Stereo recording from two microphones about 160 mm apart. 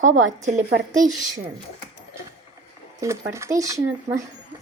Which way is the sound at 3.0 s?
20° right (ahead or behind).